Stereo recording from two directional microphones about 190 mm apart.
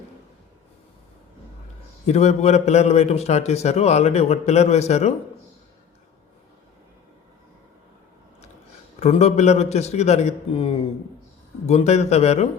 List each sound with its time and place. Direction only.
2.0 s a man's voice: 35° left (ahead or behind)
9.0 s a man's voice: 35° left (ahead or behind)